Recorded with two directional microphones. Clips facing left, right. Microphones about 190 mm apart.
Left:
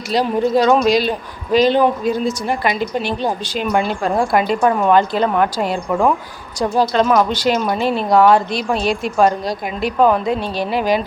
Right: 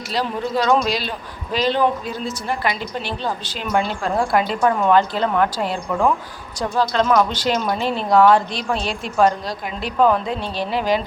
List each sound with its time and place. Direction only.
0.1 s a woman's voice: 15° left (ahead or behind)